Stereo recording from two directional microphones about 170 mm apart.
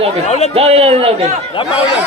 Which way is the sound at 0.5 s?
35° right (ahead or behind).